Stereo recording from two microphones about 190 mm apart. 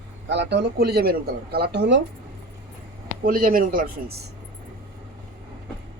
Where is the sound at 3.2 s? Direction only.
45° right (ahead or behind).